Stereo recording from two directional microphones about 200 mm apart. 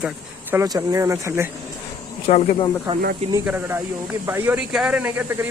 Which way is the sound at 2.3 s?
35° left (ahead or behind).